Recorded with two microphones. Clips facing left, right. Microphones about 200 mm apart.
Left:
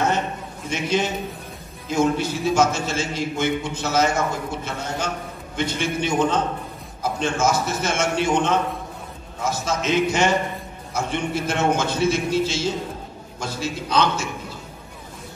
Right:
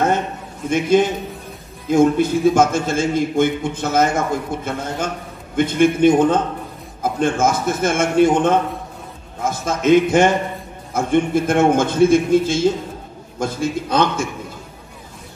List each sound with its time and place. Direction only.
0.7 s a man's voice: 50° right (ahead or behind)